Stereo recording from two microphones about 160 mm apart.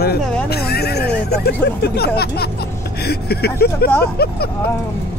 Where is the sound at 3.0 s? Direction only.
85° left.